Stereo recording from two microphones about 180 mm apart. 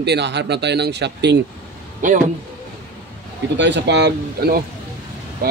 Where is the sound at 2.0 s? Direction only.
45° right (ahead or behind).